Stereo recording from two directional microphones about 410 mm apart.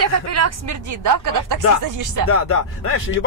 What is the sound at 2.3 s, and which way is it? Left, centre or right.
Speech, left.